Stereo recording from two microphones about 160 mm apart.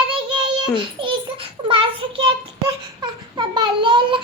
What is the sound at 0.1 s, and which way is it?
Child singing, 30° right (ahead or behind).